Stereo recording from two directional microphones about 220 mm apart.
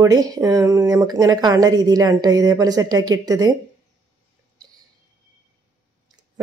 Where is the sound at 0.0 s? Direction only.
15° right (ahead or behind).